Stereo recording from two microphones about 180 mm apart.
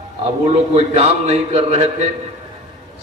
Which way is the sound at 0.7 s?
35° right (ahead or behind).